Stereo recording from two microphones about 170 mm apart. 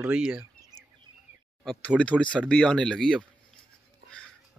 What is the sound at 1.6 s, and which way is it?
Speech, 5° left (ahead or behind).